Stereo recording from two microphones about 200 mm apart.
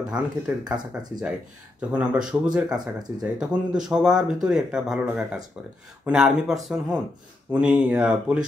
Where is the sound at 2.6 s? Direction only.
20° right (ahead or behind).